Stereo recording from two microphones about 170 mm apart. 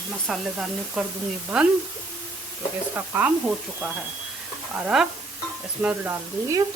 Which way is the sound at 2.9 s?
10° right (ahead or behind).